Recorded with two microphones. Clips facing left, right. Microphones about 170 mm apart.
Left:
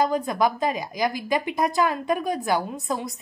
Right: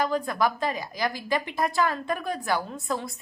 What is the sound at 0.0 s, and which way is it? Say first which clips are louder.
A woman's voice: left 3 dB; 20° left (ahead or behind).